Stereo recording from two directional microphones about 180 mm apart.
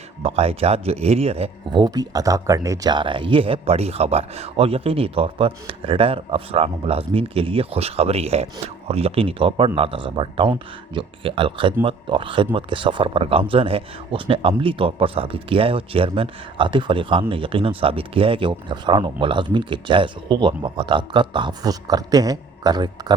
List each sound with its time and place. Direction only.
0.2 s speech: 35° right (ahead or behind)